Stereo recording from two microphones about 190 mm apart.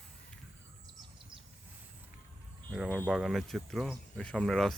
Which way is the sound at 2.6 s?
Centre (ahead or behind).